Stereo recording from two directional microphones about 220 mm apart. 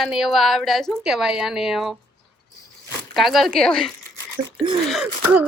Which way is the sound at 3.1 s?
Centre (ahead or behind).